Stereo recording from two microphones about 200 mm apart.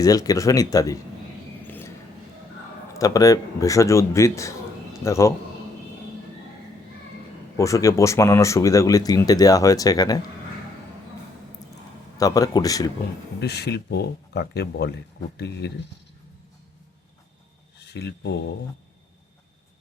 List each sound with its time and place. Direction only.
0.0 s speech: 15° left (ahead or behind)
1.6 s a sound: 10° left (ahead or behind)
2.9 s speech: 15° left (ahead or behind)
7.5 s speech: 15° left (ahead or behind)
12.1 s speech: 20° left (ahead or behind)
13.4 s speech: 55° left (ahead or behind)
17.7 s speech: 55° left (ahead or behind)